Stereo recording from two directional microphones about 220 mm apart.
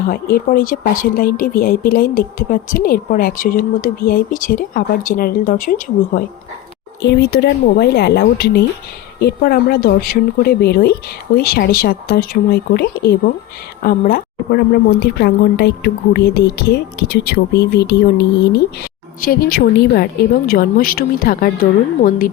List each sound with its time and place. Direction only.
0.1 s speech: 40° left (ahead or behind)
7.0 s a woman's voice: 50° left (ahead or behind)